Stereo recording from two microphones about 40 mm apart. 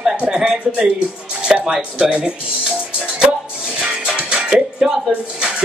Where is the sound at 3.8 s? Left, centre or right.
Right.